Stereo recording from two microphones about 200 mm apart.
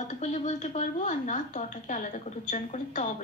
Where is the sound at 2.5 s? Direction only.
35° left (ahead or behind).